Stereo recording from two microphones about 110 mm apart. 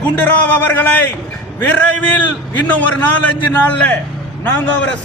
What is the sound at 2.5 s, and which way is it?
A man's voice, 15° left (ahead or behind).